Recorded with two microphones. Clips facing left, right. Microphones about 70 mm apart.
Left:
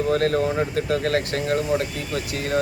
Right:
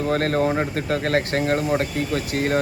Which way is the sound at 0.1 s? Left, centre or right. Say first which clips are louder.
Right 1 dB; right.